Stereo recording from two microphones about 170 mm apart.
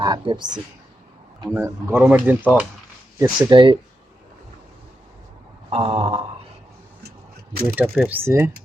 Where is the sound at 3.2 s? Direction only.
25° right (ahead or behind).